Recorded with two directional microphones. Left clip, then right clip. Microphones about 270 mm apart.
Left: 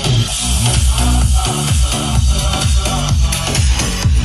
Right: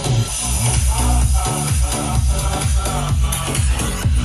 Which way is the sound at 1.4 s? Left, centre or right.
Centre.